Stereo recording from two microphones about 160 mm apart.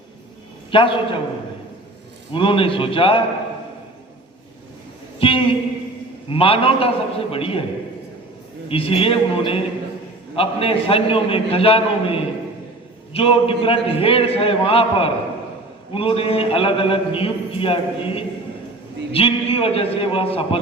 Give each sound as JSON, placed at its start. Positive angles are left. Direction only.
{"t": 0.7, "sound": "a man's voice", "side_deg": 30}
{"t": 2.3, "sound": "a man's voice", "side_deg": 35}
{"t": 5.2, "sound": "a sound", "side_deg": 35}
{"t": 6.2, "sound": "a man's voice", "side_deg": 35}
{"t": 8.7, "sound": "a man's voice", "side_deg": 35}